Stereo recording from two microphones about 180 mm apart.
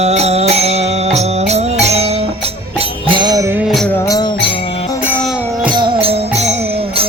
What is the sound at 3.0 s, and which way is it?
Music, 25° right (ahead or behind).